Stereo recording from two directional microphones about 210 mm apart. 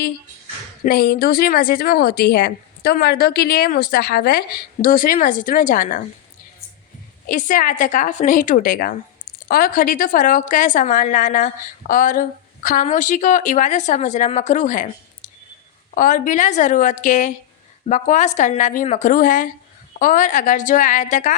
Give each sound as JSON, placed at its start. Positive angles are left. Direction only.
{"t": 0.9, "sound": "a woman's voice", "side_deg": 45}
{"t": 7.3, "sound": "a woman's voice", "side_deg": 40}
{"t": 16.0, "sound": "a woman's voice", "side_deg": 40}